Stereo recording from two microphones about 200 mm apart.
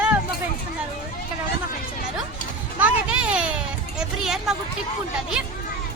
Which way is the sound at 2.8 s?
5° right (ahead or behind).